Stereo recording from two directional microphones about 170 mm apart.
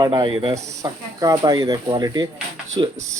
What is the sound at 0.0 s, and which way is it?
Speech, 25° right (ahead or behind).